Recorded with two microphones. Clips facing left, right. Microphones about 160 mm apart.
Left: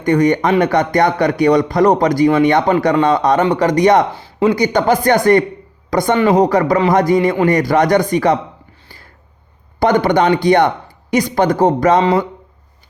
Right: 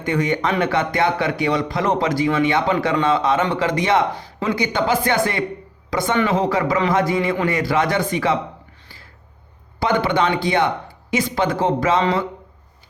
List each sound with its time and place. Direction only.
0.0 s a man's voice: 45° left (ahead or behind)
4.1 s speech: 30° left (ahead or behind)
4.5 s a man's voice: 45° left (ahead or behind)
9.8 s a man's voice: 45° left (ahead or behind)